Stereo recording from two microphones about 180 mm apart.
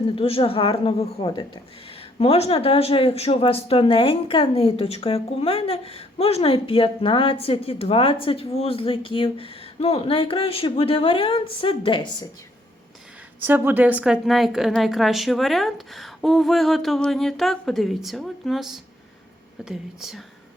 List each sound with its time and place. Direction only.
0.2 s speech: 30° left (ahead or behind)
13.4 s a woman's voice: 10° right (ahead or behind)